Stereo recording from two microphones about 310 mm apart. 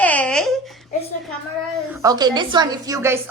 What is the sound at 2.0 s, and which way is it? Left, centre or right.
A child's voice, centre.